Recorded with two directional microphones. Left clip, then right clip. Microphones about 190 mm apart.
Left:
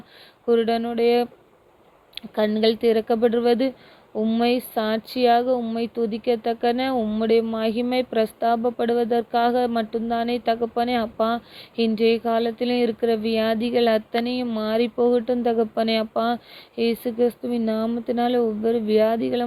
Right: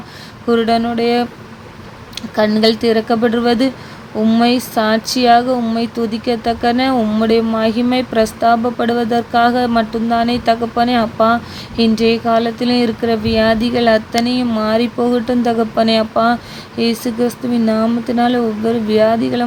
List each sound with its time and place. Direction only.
0.4 s speech: 35° left (ahead or behind)
2.3 s speech: 35° left (ahead or behind)